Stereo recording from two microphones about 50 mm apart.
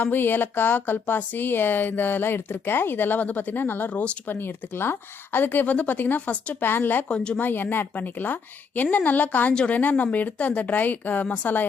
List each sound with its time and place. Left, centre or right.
0.0 s speech: left
4.3 s speech: left
6.7 s speech: left